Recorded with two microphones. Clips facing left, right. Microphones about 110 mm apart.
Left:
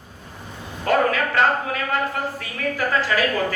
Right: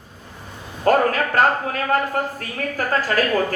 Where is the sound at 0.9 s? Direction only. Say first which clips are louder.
Right 2 dB; 40° right (ahead or behind).